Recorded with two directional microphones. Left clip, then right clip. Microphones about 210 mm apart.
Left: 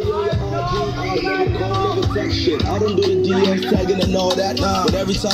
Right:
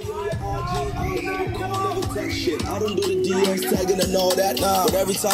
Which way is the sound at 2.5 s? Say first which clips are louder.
Left 6 dB; 60° right (ahead or behind).